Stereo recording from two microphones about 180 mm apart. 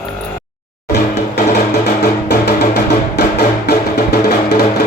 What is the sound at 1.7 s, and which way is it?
Music, 65° left (ahead or behind).